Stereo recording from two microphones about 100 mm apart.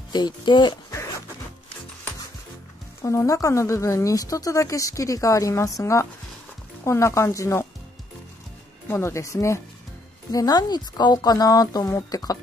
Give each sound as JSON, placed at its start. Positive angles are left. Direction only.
{"t": 0.1, "sound": "speech", "side_deg": 50}
{"t": 3.0, "sound": "speech", "side_deg": 30}
{"t": 8.8, "sound": "speech", "side_deg": 25}